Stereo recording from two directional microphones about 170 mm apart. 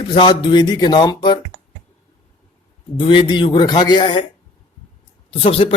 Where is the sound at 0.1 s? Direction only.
25° left (ahead or behind).